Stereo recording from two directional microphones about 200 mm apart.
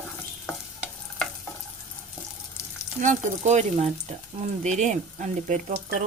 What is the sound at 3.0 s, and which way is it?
Speech, 35° right (ahead or behind).